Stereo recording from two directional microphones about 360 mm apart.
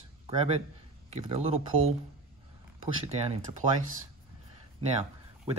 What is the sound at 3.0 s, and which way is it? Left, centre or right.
Speech, centre.